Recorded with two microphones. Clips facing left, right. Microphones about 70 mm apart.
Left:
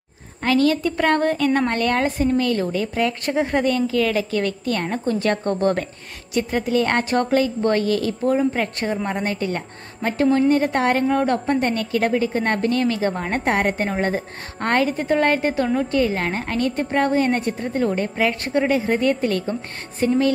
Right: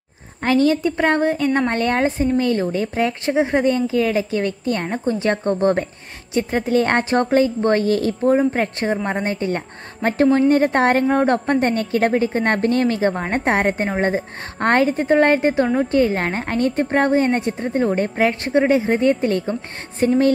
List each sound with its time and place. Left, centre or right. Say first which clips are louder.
0.4 s a woman's voice: right 2 dB; right
6.3 s a woman's voice: right 2 dB; right
14.6 s a woman's voice: right 3 dB; right